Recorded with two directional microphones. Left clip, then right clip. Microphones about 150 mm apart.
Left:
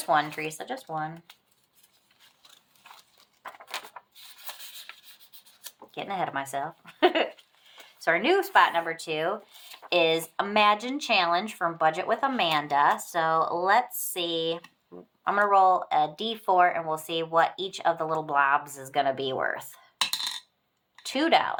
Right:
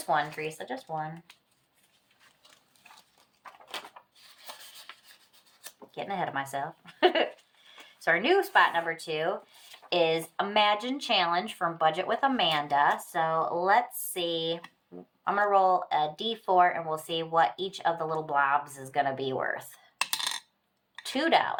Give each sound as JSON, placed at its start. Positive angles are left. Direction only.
{"t": 0.1, "sound": "speech", "side_deg": 35}
{"t": 5.9, "sound": "speech", "side_deg": 35}
{"t": 21.0, "sound": "speech", "side_deg": 30}